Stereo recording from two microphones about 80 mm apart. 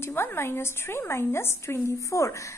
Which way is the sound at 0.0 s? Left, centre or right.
Left.